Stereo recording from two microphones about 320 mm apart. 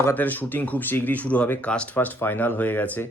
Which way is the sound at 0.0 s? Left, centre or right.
Centre.